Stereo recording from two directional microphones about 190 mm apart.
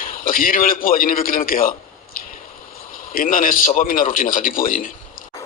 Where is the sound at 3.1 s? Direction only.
45° left (ahead or behind).